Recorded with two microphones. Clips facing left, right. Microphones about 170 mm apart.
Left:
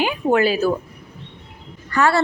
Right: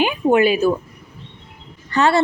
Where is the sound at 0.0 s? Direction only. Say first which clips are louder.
Right 2 dB; 15° right (ahead or behind).